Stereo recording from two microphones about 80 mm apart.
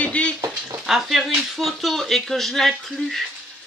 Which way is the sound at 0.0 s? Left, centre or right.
Centre.